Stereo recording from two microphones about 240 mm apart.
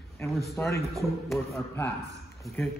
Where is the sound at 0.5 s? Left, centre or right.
Centre.